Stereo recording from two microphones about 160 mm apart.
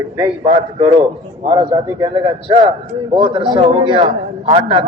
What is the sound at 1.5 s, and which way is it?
A man's voice, 30° right (ahead or behind).